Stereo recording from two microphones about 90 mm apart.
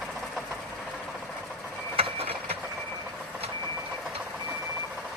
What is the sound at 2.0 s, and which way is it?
Mechanisms, 90° right.